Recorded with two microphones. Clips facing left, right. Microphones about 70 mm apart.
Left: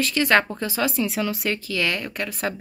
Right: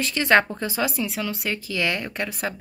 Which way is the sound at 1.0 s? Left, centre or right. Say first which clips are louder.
Left 3 dB; centre.